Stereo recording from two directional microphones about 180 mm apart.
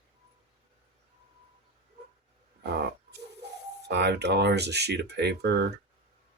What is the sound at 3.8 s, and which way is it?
Speech, 70° right (ahead or behind).